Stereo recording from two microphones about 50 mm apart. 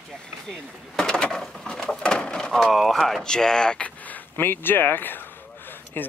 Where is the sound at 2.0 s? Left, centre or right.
Centre.